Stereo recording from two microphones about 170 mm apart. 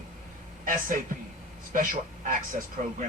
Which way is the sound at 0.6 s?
50° right (ahead or behind).